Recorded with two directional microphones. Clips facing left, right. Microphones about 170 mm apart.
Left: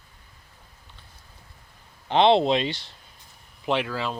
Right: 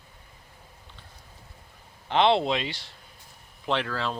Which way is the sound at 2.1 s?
25° left (ahead or behind).